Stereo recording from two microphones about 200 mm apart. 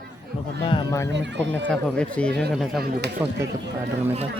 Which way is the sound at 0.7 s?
15° left (ahead or behind).